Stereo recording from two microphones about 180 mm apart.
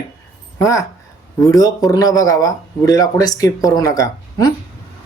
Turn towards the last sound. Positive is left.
turn(degrees=20)  # may be behind; listen again after turning